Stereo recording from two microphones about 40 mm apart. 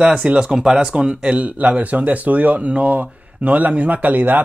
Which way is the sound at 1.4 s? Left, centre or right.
Right.